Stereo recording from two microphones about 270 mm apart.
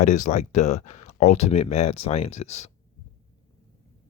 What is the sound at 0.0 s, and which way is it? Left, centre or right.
Speech, left.